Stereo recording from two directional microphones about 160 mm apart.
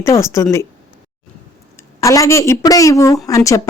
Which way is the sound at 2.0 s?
20° left (ahead or behind).